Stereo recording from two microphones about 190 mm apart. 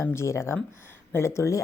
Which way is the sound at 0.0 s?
15° left (ahead or behind).